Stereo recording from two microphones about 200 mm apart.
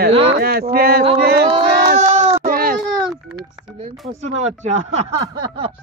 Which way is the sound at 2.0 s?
35° right (ahead or behind).